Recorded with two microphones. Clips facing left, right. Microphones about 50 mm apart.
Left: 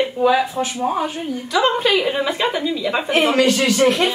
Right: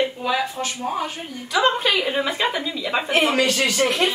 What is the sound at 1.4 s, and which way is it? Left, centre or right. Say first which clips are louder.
A woman's voice: left 2 dB; centre.